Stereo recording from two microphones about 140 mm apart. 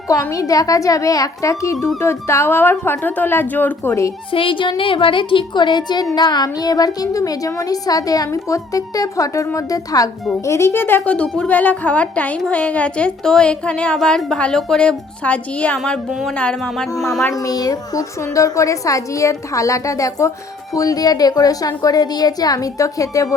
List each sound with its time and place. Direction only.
0.1 s a woman's voice: 25° left (ahead or behind)
4.3 s a woman's voice: 40° left (ahead or behind); by 16.0 s 10° left (ahead or behind)
16.0 s music: 5° right (ahead or behind)
16.3 s music: 5° left (ahead or behind)
17.2 s a woman's voice: 25° left (ahead or behind)